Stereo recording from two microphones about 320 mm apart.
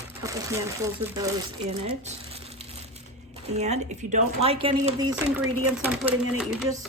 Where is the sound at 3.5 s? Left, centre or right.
Right.